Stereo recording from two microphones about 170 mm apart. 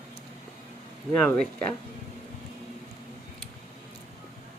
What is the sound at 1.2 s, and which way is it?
Speech, 5° left (ahead or behind).